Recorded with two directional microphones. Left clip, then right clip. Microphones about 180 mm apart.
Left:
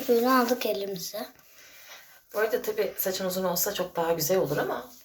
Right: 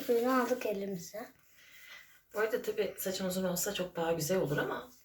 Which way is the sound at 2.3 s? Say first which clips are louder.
Left 6 dB; 20° right (ahead or behind).